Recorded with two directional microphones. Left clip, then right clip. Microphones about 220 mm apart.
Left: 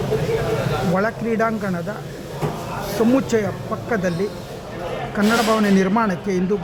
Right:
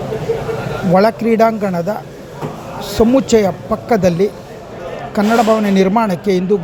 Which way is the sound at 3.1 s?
15° right (ahead or behind).